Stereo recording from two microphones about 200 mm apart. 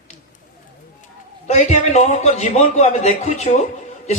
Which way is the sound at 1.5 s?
35° left (ahead or behind).